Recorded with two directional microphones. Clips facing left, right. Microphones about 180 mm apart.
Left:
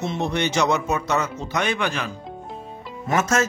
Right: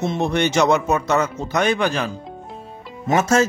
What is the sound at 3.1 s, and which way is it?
Speech, 30° right (ahead or behind).